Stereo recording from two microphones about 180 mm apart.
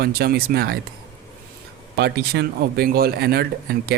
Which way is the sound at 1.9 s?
70° right (ahead or behind).